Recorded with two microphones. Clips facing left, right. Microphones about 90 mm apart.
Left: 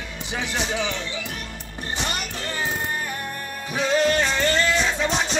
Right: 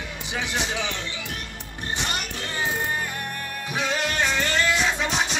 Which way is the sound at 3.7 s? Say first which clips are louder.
Left 6 dB; 15° right (ahead or behind).